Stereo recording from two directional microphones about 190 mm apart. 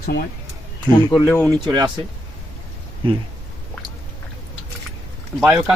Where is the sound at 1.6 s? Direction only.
25° right (ahead or behind).